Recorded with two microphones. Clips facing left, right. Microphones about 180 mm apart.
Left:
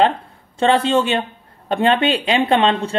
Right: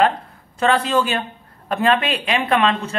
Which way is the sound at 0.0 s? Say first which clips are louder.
Left 2 dB; 25° left (ahead or behind).